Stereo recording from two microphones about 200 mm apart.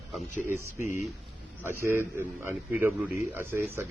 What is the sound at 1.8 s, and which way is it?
A man's voice, 10° right (ahead or behind).